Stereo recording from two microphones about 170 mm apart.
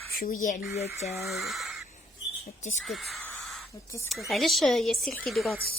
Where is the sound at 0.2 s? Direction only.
50° left (ahead or behind).